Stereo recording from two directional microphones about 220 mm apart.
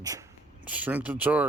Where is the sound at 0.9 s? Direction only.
5° right (ahead or behind).